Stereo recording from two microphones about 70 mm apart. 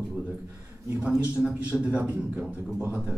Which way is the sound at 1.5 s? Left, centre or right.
Centre.